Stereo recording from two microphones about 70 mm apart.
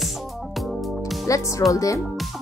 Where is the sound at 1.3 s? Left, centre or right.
Left.